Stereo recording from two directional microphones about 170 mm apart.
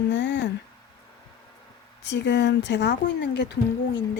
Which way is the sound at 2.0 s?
90° left.